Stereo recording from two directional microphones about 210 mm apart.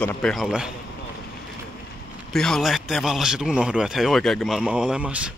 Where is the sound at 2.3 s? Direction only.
Centre (ahead or behind).